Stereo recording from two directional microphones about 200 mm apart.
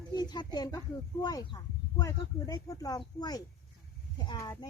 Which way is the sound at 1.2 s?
20° left (ahead or behind).